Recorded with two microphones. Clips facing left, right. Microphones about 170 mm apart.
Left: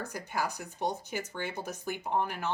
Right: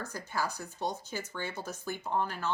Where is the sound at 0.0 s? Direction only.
15° left (ahead or behind).